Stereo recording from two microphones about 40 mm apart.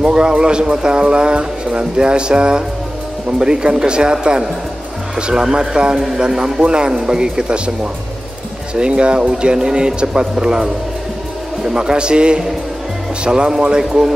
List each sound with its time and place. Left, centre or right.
0.0 s speech: centre